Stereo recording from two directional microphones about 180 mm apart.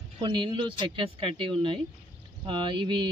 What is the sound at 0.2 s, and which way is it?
Speech, 25° right (ahead or behind).